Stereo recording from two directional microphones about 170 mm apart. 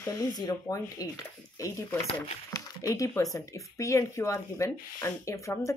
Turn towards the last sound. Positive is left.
turn(degrees=20)  # may be behind; listen again after turning